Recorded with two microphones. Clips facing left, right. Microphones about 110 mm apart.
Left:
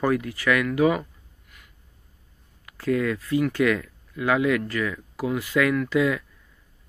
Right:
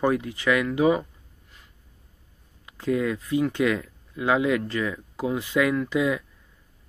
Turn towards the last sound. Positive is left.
turn(degrees=-20)  # may be behind; listen again after turning